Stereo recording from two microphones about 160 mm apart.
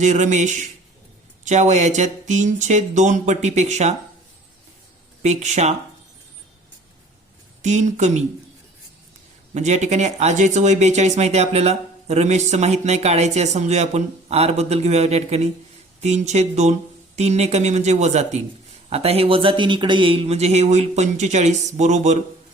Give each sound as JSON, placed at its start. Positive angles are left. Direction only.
{"t": 0.0, "sound": "speech", "side_deg": -50}
{"t": 5.2, "sound": "speech", "side_deg": -45}
{"t": 7.6, "sound": "speech", "side_deg": -45}
{"t": 9.6, "sound": "a man's voice", "side_deg": -45}